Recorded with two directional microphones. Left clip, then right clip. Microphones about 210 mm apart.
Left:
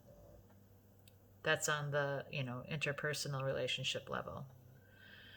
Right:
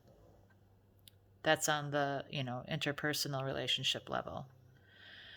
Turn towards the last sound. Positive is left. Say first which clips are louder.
# right 4 dB
turn(degrees=-45)  # may be behind; listen again after turning